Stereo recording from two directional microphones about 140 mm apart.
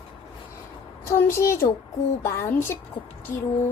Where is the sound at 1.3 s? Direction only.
20° left (ahead or behind).